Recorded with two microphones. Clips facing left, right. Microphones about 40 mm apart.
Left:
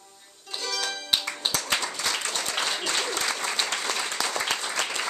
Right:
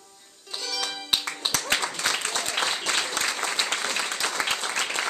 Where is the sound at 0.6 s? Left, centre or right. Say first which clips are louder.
Left 1 dB; centre.